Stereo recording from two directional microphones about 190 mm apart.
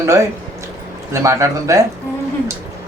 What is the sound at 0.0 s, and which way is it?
A man's voice, 15° right (ahead or behind).